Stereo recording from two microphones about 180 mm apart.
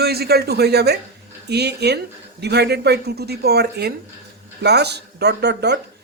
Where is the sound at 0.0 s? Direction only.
60° right (ahead or behind).